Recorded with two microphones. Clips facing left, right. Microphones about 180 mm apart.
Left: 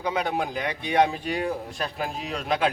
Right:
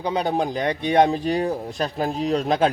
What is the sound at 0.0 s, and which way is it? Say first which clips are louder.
Speech: right 4 dB; 30° right (ahead or behind).